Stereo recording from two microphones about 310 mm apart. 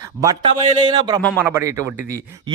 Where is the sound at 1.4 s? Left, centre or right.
Centre.